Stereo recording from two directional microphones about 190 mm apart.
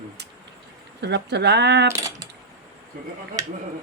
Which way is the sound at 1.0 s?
60° right (ahead or behind).